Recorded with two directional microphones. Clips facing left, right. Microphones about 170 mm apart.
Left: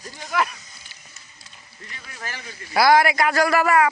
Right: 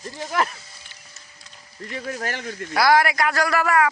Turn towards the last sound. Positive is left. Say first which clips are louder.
# left 2 dB
turn(degrees=0)  # may be behind; listen again after turning